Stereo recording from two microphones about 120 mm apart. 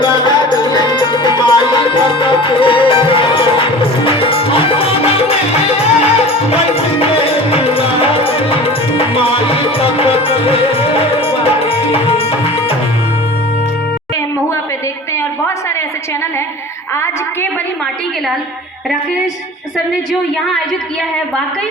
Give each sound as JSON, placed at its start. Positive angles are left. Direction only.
{"t": 0.0, "sound": "music", "side_deg": 40}
{"t": 15.1, "sound": "a sound", "side_deg": 20}
{"t": 16.9, "sound": "a woman's voice", "side_deg": 20}